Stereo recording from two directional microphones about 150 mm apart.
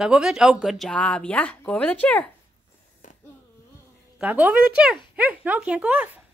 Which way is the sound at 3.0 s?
55° left (ahead or behind).